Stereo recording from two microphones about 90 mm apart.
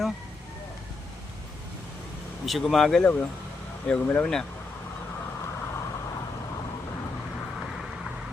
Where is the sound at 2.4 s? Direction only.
Centre (ahead or behind).